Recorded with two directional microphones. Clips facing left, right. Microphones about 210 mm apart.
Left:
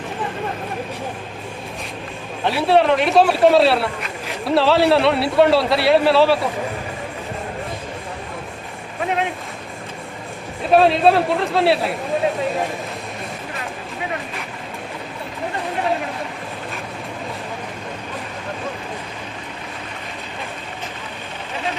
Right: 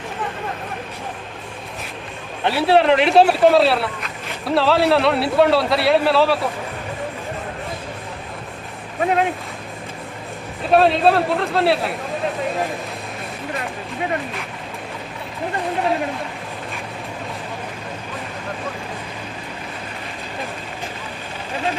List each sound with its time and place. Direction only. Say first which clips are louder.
2.4 s speech: even; centre (ahead or behind)
10.7 s speech: left 1 dB; centre (ahead or behind)